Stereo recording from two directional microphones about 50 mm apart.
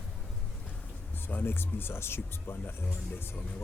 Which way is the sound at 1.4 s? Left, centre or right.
Left.